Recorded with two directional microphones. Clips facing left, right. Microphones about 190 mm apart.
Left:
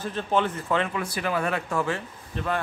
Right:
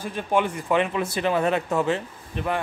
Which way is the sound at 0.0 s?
10° right (ahead or behind).